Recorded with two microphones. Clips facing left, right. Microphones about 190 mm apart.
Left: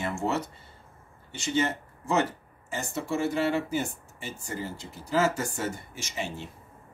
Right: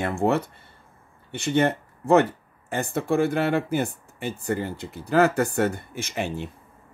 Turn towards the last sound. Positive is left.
turn(degrees=-60)  # may be behind; listen again after turning